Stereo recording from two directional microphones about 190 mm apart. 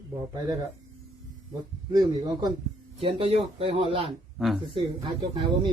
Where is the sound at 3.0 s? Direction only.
30° right (ahead or behind).